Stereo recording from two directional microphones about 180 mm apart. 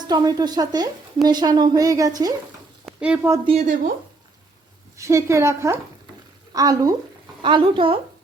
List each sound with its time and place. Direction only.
0.1 s a woman's voice: 20° right (ahead or behind)
2.8 s speech: 5° right (ahead or behind)
3.4 s speech: 35° right (ahead or behind)
4.9 s a woman's voice: 15° right (ahead or behind)